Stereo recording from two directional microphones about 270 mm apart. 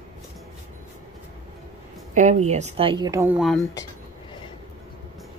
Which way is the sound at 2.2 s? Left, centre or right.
Right.